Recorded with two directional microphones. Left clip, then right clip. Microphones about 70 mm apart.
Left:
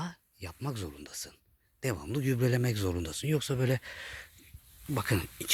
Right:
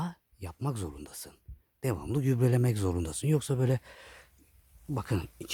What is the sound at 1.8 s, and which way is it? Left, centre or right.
Speech, right.